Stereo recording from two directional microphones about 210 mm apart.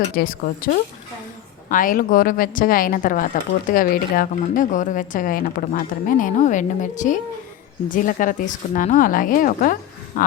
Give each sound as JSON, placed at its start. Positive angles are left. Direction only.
{"t": 0.2, "sound": "a woman's voice", "side_deg": 45}